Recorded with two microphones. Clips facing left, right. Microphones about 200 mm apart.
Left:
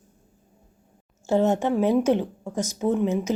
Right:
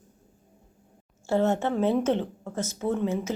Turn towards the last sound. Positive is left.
turn(degrees=15)  # may be behind; listen again after turning